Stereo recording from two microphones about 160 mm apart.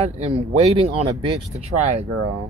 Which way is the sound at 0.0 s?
40° right (ahead or behind).